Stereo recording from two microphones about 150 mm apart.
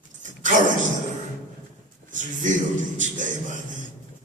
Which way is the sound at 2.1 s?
60° right (ahead or behind).